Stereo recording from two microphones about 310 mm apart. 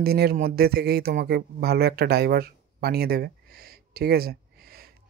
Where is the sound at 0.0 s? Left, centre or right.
Right.